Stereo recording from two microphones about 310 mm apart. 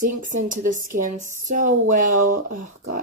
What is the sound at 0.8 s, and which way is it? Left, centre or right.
Speech, right.